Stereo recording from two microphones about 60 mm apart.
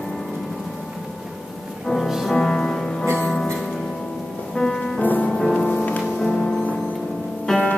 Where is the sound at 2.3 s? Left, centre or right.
Centre.